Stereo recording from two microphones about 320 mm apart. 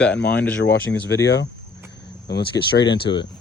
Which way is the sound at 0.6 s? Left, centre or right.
Left.